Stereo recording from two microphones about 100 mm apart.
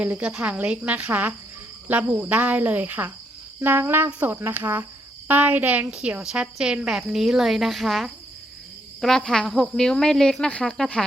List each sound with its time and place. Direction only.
0.0 s a woman's voice: 15° right (ahead or behind); by 11.0 s 10° left (ahead or behind)